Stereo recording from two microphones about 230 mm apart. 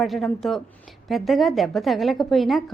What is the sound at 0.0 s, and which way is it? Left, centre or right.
A woman's voice, centre.